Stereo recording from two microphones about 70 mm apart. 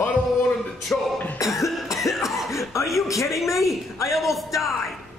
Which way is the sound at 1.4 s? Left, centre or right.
Left.